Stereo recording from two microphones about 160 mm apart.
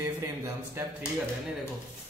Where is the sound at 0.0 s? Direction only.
15° right (ahead or behind).